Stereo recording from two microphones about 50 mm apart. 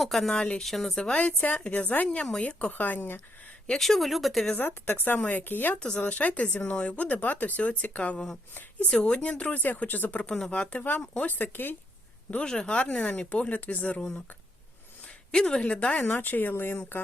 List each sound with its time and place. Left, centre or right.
0.0 s speech: centre
0.6 s speech: centre
1.4 s speech: left
3.8 s speech: centre
4.5 s speech: left
5.1 s speech: left
5.4 s speech: left
5.8 s speech: left
9.4 s speech: left
11.3 s speech: left
12.3 s speech: centre
15.0 s a sound: centre
15.6 s speech: left
16.0 s speech: left